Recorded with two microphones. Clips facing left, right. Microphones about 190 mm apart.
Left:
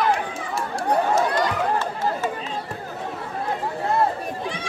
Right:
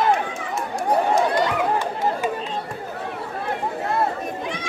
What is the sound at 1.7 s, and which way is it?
Chatter, 15° right (ahead or behind).